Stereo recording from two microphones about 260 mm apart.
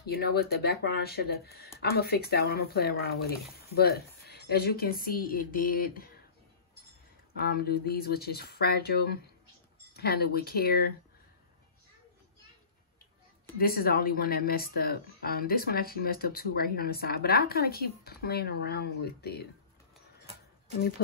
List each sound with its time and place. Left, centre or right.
0.0 s speech: left
7.3 s speech: left
13.6 s speech: left